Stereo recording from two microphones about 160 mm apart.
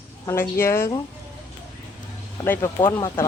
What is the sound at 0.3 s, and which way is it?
Speech, 15° left (ahead or behind).